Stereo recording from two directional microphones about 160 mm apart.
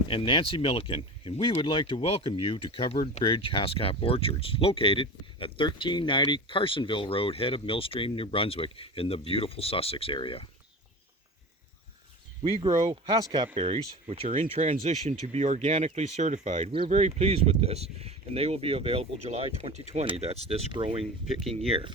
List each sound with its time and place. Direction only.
0.1 s speech: 35° left (ahead or behind)
12.8 s speech: 25° right (ahead or behind)
13.5 s speech: 40° right (ahead or behind)